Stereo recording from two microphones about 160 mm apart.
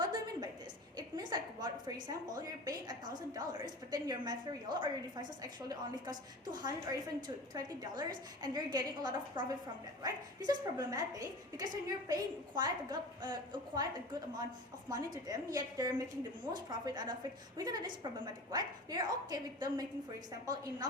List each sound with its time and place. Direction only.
0.1 s a sound: 25° right (ahead or behind)
0.9 s a woman's voice: 25° right (ahead or behind)
14.8 s a woman's voice: 25° right (ahead or behind)